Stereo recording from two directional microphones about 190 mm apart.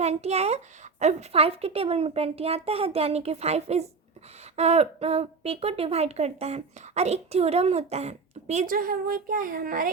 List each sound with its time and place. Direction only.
0.0 s a woman's voice: 35° right (ahead or behind)
8.6 s a child's voice: 50° right (ahead or behind)